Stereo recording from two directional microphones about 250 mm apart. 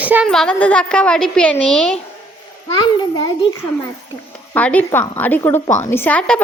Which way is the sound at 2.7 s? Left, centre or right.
Centre.